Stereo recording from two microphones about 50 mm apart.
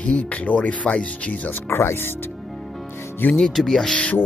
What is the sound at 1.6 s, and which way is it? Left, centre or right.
Speech, left.